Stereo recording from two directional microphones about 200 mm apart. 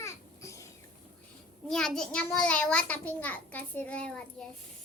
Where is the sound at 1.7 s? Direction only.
5° left (ahead or behind).